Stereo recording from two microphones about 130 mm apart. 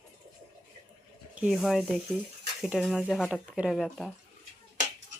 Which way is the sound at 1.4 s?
5° right (ahead or behind).